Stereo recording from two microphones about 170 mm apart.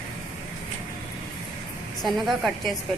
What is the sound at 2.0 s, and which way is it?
Speech, centre (ahead or behind).